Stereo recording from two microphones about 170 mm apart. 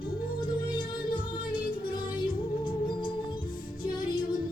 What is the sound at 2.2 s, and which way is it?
Music, 30° left (ahead or behind).